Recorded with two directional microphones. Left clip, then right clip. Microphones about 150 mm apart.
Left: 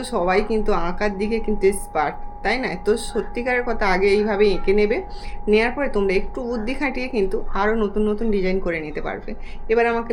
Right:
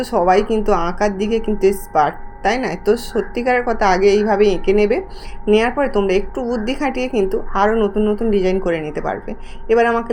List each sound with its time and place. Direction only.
0.0 s a woman's voice: 30° right (ahead or behind)
7.8 s a woman's voice: 5° right (ahead or behind)
8.4 s a woman's voice: 30° right (ahead or behind)